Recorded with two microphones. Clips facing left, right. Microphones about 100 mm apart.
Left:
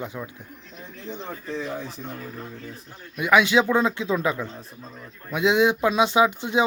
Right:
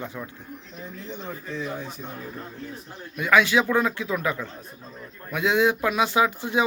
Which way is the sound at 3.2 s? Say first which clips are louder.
Left 1 dB; 20° left (ahead or behind).